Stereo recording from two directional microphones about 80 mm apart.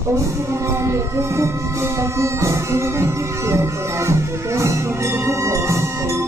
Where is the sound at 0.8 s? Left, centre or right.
Right.